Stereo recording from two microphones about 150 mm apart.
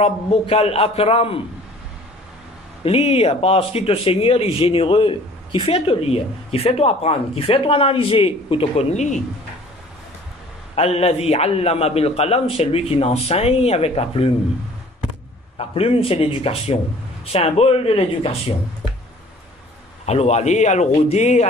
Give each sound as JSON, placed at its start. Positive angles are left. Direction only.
{"t": 0.0, "sound": "speech", "side_deg": 40}
{"t": 2.8, "sound": "speech", "side_deg": 40}
{"t": 10.8, "sound": "a man's voice", "side_deg": 45}
{"t": 15.5, "sound": "speech", "side_deg": 40}
{"t": 20.1, "sound": "a man's voice", "side_deg": 45}